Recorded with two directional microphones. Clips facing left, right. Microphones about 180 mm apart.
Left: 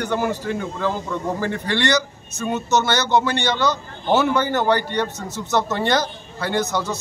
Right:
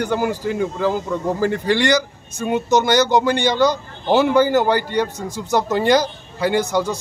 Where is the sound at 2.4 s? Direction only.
15° right (ahead or behind).